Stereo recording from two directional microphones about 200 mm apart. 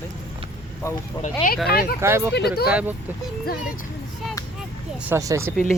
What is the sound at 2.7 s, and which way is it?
Speech, 5° right (ahead or behind).